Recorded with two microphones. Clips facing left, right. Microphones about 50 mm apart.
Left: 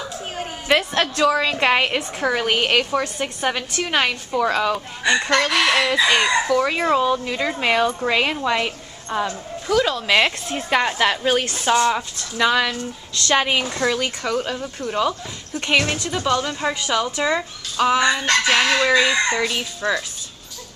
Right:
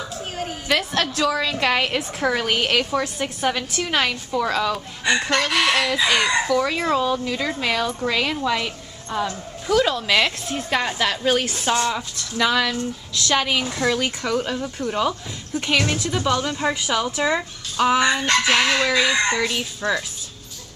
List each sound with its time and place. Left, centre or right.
0.7 s speech: centre
2.0 s a woman's voice: centre
9.7 s speech: centre
10.0 s speech: centre
13.3 s speech: centre
13.7 s speech: centre
15.7 s speech: centre
18.2 s chicken: centre
18.5 s speech: centre